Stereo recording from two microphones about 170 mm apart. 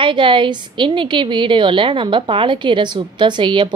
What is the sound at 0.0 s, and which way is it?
A woman's voice, 30° right (ahead or behind).